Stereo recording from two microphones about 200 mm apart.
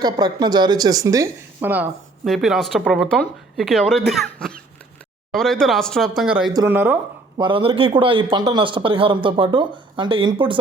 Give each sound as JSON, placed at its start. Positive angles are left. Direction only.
{"t": 0.0, "sound": "speech", "side_deg": -20}
{"t": 6.5, "sound": "speech", "side_deg": -15}
{"t": 7.3, "sound": "a man's voice", "side_deg": -25}